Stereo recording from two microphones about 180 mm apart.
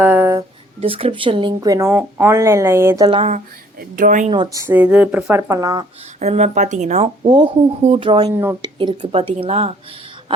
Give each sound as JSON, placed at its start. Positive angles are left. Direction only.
{"t": 0.0, "sound": "a sound", "side_deg": -10}
{"t": 0.8, "sound": "a woman's voice", "side_deg": -35}
{"t": 3.1, "sound": "speech", "side_deg": -35}
{"t": 3.8, "sound": "speech", "side_deg": -45}
{"t": 4.5, "sound": "a woman's voice", "side_deg": -10}
{"t": 6.1, "sound": "speech", "side_deg": -40}
{"t": 7.3, "sound": "speech", "side_deg": -25}